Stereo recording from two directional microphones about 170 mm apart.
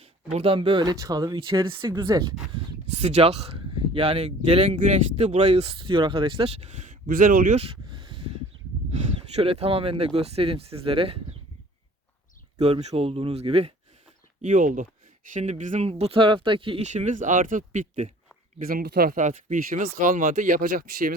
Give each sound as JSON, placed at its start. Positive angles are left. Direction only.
{"t": 0.0, "sound": "speech", "side_deg": -35}
{"t": 3.0, "sound": "speech", "side_deg": -40}
{"t": 7.5, "sound": "a sound", "side_deg": -35}
{"t": 8.9, "sound": "speech", "side_deg": -40}
{"t": 12.5, "sound": "speech", "side_deg": -40}
{"t": 14.4, "sound": "speech", "side_deg": -50}
{"t": 18.7, "sound": "speech", "side_deg": -60}